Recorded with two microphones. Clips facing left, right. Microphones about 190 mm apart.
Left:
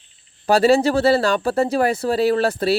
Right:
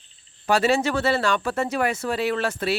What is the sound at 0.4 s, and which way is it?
Speech, 35° left (ahead or behind).